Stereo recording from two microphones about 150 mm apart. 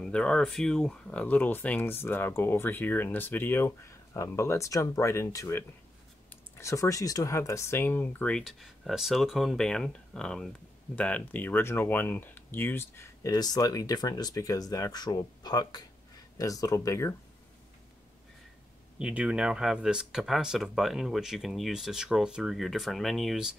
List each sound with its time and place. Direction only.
0.0 s speech: 5° left (ahead or behind)
6.6 s speech: 20° left (ahead or behind)
18.9 s speech: 5° right (ahead or behind)